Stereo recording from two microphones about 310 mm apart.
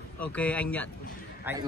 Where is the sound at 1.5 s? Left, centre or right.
Centre.